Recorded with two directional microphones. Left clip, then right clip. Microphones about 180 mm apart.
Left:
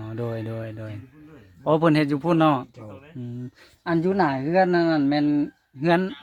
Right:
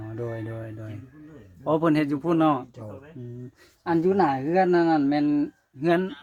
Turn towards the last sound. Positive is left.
turn(degrees=50)  # may be behind; listen again after turning